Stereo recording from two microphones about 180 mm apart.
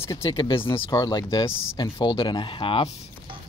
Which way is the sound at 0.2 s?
30° left (ahead or behind).